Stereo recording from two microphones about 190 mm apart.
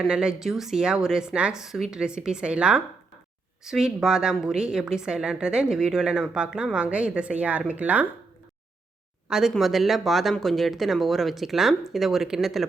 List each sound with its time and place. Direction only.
0.0 s a woman's voice: 5° right (ahead or behind)
9.3 s a woman's voice: centre (ahead or behind)